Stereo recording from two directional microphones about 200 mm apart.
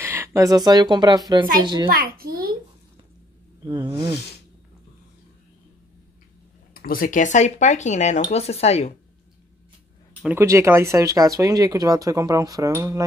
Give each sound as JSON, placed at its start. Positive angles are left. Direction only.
{"t": 0.0, "sound": "a child's voice", "side_deg": -15}
{"t": 1.9, "sound": "a child's voice", "side_deg": -45}
{"t": 3.6, "sound": "a child's voice", "side_deg": -20}
{"t": 6.7, "sound": "speech", "side_deg": 45}
{"t": 10.2, "sound": "speech", "side_deg": -15}